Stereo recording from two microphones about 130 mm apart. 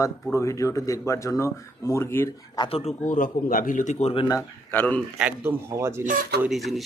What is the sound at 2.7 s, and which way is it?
Speech, 50° left (ahead or behind).